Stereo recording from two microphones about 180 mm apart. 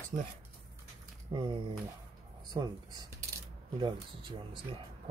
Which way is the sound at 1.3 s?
25° right (ahead or behind).